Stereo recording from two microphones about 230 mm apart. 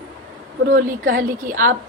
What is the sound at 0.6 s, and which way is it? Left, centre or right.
A woman's voice, right.